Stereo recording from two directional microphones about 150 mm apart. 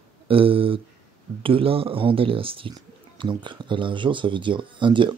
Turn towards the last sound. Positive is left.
turn(degrees=-35)  # may be behind; listen again after turning